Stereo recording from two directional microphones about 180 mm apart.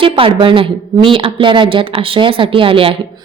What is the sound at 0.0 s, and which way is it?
A woman's voice, 30° right (ahead or behind).